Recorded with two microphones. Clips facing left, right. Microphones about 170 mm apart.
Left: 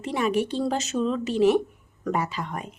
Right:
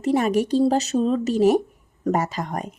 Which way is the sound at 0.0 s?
40° right (ahead or behind).